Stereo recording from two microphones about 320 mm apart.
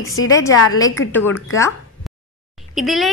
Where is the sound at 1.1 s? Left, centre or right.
Centre.